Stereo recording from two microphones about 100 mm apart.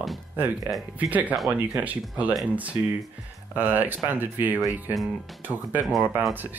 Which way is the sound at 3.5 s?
20° right (ahead or behind).